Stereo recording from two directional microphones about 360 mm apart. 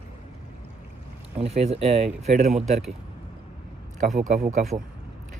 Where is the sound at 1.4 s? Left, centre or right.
Centre.